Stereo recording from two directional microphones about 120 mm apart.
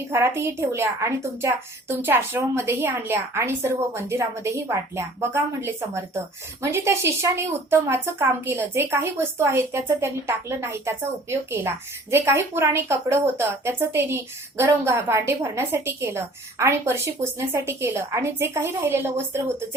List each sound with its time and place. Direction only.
0.1 s a woman's voice: 20° right (ahead or behind)